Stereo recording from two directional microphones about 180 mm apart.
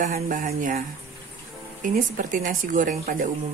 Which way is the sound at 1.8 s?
50° right (ahead or behind).